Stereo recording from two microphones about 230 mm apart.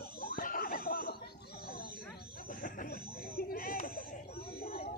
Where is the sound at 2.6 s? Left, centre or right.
Left.